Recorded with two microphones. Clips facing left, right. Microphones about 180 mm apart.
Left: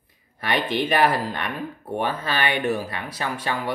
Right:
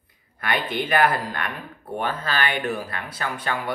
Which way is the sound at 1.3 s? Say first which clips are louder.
Left 2 dB; 20° left (ahead or behind).